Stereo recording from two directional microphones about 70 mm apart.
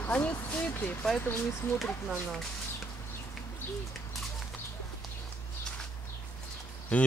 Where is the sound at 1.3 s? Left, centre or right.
Left.